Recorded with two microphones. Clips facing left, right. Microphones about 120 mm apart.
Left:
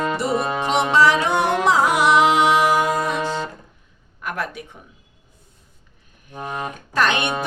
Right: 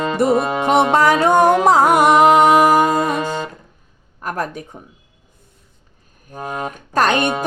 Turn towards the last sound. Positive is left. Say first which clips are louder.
# right 4 dB
turn(degrees=-40)  # may be behind; listen again after turning